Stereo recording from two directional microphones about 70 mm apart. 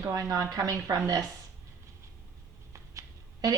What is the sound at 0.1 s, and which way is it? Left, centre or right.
A woman's voice, right.